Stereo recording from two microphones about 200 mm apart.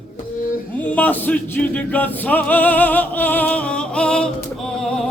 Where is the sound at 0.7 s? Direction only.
5° left (ahead or behind).